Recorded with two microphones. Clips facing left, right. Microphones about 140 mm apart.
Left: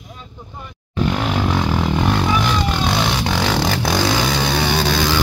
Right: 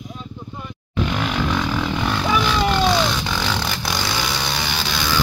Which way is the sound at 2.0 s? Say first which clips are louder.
Left 1 dB; 20° left (ahead or behind).